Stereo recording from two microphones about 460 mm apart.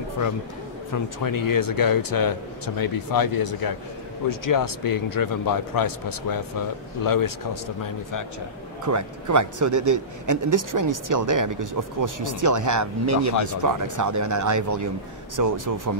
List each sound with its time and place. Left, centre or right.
0.9 s speech: left
8.8 s a man's voice: right